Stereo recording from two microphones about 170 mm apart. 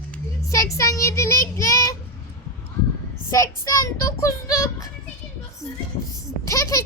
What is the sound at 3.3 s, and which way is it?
Speech, 20° left (ahead or behind).